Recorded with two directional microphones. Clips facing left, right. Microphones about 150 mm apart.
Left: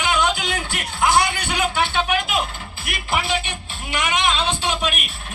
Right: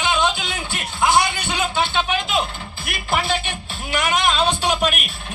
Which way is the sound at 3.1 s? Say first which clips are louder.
Right 1 dB; 30° right (ahead or behind).